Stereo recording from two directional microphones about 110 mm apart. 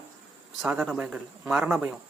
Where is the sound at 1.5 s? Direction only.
10° right (ahead or behind).